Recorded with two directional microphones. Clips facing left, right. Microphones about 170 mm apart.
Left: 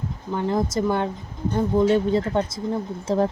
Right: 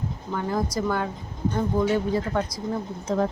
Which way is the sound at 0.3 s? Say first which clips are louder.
Left 4 dB; 20° left (ahead or behind).